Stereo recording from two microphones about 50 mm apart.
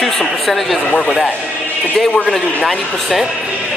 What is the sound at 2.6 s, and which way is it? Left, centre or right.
Speech, centre.